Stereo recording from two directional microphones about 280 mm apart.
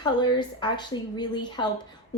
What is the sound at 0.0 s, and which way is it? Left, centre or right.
A woman's voice, centre.